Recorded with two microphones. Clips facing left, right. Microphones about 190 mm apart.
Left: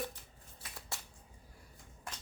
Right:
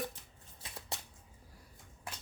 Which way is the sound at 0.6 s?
20° right (ahead or behind).